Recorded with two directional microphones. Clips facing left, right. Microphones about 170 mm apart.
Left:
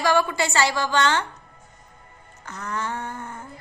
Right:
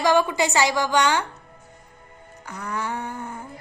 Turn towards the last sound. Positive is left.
turn(degrees=-10)  # may be behind; listen again after turning